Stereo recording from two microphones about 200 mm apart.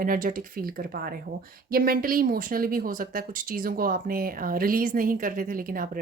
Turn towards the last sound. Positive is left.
turn(degrees=-45)  # may be behind; listen again after turning